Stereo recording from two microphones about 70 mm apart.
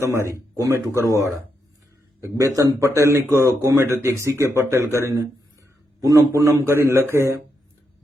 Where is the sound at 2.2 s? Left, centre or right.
Right.